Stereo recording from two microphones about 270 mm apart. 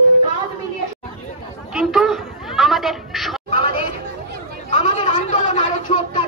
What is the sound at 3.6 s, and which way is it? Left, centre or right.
Chatter, right.